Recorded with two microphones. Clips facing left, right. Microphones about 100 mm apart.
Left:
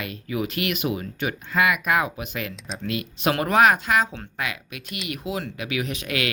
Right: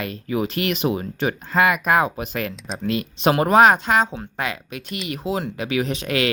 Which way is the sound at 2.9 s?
30° right (ahead or behind).